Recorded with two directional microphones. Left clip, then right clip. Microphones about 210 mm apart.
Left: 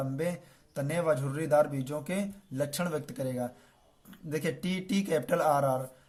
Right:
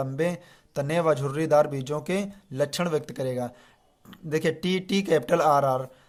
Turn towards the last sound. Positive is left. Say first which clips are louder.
# right 6 dB
turn(degrees=-35)  # may be behind; listen again after turning